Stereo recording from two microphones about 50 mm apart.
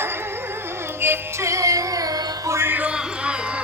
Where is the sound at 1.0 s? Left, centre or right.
Right.